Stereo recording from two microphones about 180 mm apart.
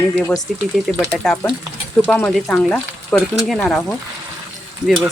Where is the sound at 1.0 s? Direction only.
5° left (ahead or behind).